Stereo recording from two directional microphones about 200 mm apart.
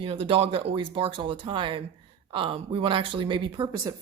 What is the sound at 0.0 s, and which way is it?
Speech, 25° right (ahead or behind).